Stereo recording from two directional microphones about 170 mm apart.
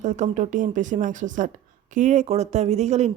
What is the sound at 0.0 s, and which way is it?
A woman's voice, 45° right (ahead or behind).